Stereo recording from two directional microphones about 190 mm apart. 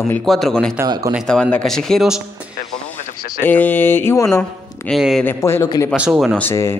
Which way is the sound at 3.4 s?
10° left (ahead or behind).